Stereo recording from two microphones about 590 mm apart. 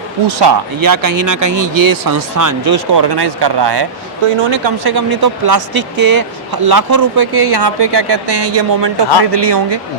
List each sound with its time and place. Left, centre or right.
0.3 s speech: right